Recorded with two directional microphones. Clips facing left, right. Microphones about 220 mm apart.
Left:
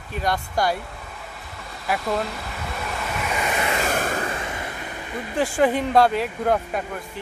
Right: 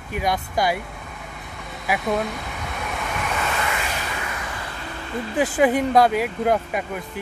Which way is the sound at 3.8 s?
50° left (ahead or behind).